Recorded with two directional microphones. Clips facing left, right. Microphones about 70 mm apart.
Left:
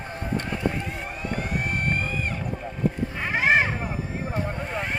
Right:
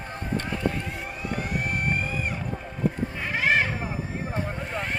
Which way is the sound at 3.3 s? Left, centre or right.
Left.